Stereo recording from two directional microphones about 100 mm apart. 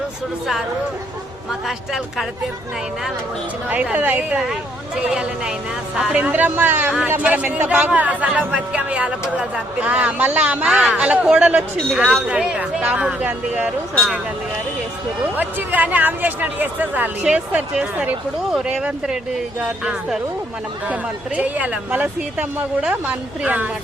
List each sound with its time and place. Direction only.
1.6 s speech: centre (ahead or behind)
3.7 s speech: 15° right (ahead or behind)
6.0 s speech: 10° right (ahead or behind)
15.4 s speech: 15° right (ahead or behind)